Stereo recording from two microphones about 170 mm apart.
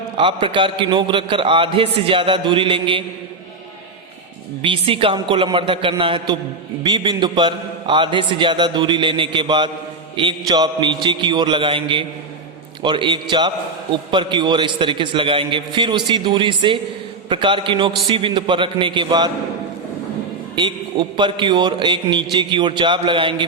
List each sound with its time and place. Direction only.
0.2 s a man's voice: 30° right (ahead or behind)
4.6 s a man's voice: 30° right (ahead or behind)
20.6 s a man's voice: 25° right (ahead or behind)